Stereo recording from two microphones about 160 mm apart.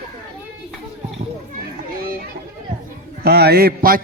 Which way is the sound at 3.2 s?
85° right.